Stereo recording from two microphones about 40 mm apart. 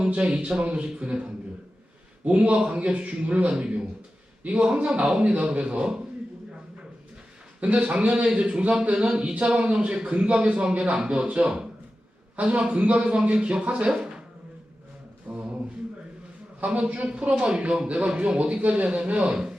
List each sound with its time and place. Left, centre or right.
0.3 s a man's voice: right
3.5 s a man's voice: right
7.6 s a man's voice: right
8.1 s a man's voice: right
15.3 s a sound: right
16.7 s a man's voice: right